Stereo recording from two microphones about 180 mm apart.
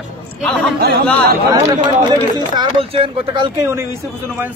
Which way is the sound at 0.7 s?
60° right (ahead or behind).